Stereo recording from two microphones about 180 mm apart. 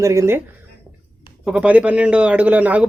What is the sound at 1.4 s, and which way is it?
Speech, 5° right (ahead or behind).